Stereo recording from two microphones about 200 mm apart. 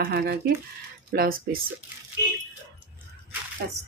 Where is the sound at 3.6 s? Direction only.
55° right (ahead or behind).